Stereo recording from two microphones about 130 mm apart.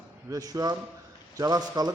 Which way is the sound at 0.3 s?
25° right (ahead or behind).